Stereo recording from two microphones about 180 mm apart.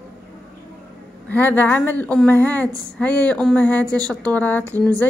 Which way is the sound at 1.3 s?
10° left (ahead or behind).